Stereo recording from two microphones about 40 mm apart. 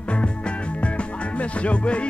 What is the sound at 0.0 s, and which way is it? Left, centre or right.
Music, left.